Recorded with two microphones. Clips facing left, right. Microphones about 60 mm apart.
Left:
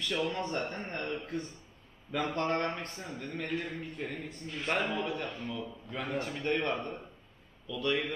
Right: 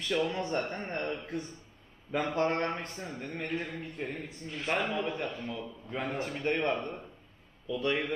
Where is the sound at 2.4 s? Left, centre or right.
Right.